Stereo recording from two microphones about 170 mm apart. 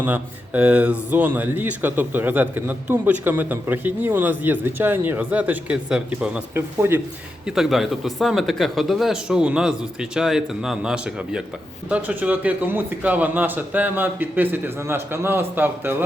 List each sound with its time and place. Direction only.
0.0 s speech: 10° right (ahead or behind)
7.4 s speech: centre (ahead or behind)